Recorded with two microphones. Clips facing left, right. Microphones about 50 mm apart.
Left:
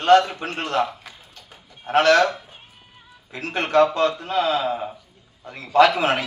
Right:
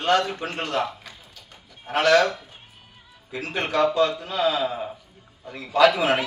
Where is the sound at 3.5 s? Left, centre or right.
Left.